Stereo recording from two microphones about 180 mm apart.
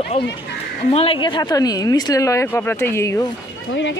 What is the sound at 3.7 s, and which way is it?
Speech, 90° left.